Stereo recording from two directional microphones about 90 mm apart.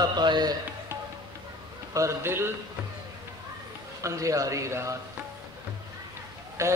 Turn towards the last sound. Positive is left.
turn(degrees=-35)  # may be behind; listen again after turning